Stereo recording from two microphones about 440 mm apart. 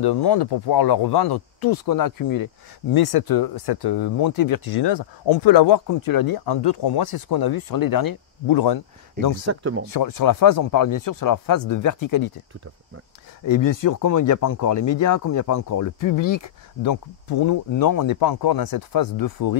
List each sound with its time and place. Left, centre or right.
0.0 s speech: left
5.9 s speech: left
9.5 s speech: right
9.8 s speech: left
13.5 s speech: left